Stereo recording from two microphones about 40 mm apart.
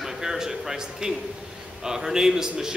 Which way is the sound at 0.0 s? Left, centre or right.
Centre.